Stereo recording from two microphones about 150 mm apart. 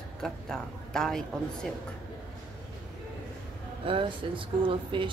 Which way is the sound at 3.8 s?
35° right (ahead or behind).